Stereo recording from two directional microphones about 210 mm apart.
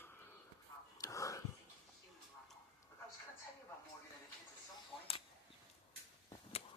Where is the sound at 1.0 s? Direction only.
15° left (ahead or behind).